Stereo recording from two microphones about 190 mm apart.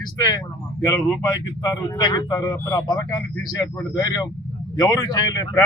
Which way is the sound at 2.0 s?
20° left (ahead or behind).